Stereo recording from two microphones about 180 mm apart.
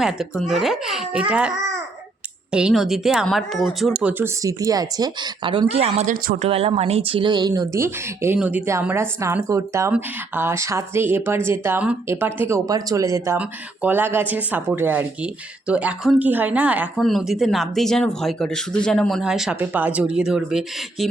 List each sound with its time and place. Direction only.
0.0 s a child's voice: 5° right (ahead or behind)
4.0 s speech: 15° right (ahead or behind)